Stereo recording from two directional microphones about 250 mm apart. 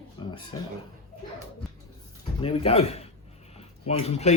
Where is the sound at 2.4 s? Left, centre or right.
Left.